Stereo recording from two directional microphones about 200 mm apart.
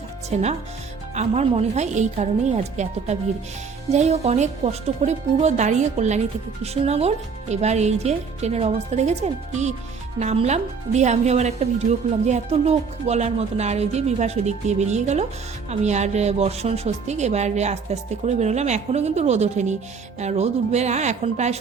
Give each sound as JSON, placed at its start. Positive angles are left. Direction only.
{"t": 1.1, "sound": "speech", "side_deg": -35}
{"t": 3.9, "sound": "speech", "side_deg": -35}